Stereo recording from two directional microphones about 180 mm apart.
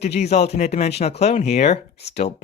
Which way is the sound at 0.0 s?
35° left (ahead or behind).